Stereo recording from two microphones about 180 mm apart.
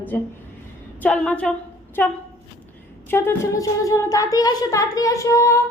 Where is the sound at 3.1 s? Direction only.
15° left (ahead or behind).